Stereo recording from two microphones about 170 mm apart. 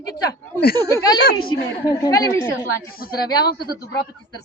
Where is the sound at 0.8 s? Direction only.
15° left (ahead or behind).